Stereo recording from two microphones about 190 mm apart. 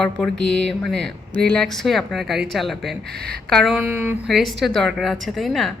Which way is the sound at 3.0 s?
55° right (ahead or behind).